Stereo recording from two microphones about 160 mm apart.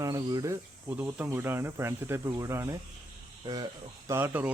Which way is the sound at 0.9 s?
10° right (ahead or behind).